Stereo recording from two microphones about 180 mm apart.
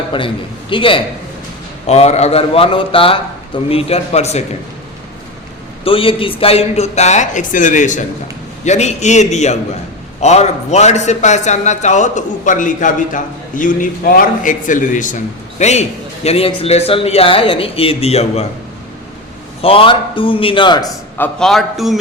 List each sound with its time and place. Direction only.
0.1 s a man's voice: 30° left (ahead or behind)
5.8 s a man's voice: 30° left (ahead or behind)
19.6 s a man's voice: 30° left (ahead or behind)
21.2 s a man's voice: 5° left (ahead or behind)